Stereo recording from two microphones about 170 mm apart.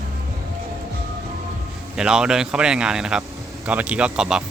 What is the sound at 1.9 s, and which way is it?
A man's voice, 5° right (ahead or behind).